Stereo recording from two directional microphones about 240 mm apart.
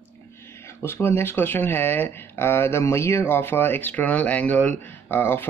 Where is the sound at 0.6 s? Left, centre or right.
Centre.